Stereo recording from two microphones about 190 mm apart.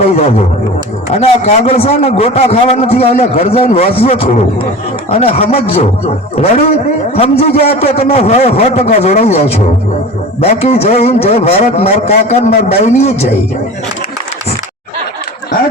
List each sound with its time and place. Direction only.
0.0 s a man's voice: 35° left (ahead or behind)